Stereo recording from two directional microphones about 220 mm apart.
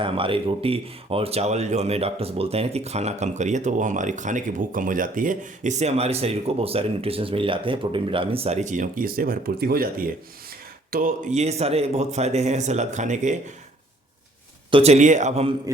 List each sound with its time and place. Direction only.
0.0 s speech: 25° right (ahead or behind)
14.7 s speech: 25° right (ahead or behind)